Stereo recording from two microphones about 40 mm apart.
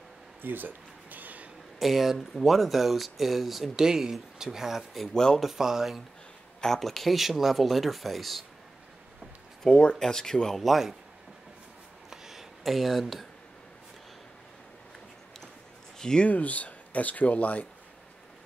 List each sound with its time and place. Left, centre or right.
0.4 s a sound: right
1.8 s speech: centre
3.8 s speech: centre
5.1 s speech: centre
5.4 s speech: centre
6.6 s speech: centre
9.7 s speech: left
9.9 s speech: centre
10.6 s speech: centre
12.1 s a sound: centre
16.0 s speech: centre
16.3 s speech: left